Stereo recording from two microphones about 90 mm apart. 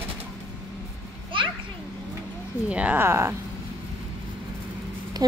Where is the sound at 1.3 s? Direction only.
70° right (ahead or behind).